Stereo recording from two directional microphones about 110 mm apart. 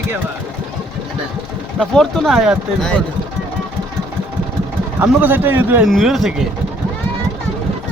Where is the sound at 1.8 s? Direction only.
5° left (ahead or behind).